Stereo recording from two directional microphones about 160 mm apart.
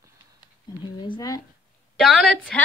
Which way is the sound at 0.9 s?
30° left (ahead or behind).